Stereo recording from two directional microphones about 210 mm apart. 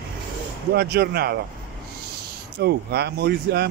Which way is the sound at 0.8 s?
50° right (ahead or behind).